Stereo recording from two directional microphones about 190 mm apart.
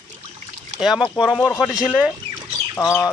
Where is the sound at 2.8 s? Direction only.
15° left (ahead or behind).